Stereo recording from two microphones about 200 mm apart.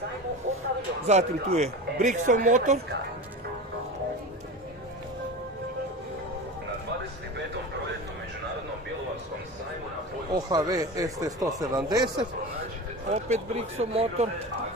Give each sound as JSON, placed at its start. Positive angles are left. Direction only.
{"t": 1.0, "sound": "speech", "side_deg": -35}
{"t": 10.3, "sound": "speech", "side_deg": -20}
{"t": 13.1, "sound": "speech", "side_deg": -35}